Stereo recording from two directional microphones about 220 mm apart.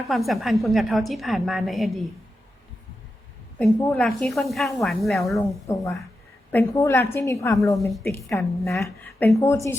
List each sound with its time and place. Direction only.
0.0 s a woman's voice: centre (ahead or behind)
3.6 s a woman's voice: 5° left (ahead or behind)
5.6 s a woman's voice: 15° left (ahead or behind)
7.8 s a woman's voice: centre (ahead or behind)